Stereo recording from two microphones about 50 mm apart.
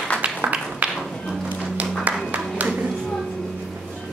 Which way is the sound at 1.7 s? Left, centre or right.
Right.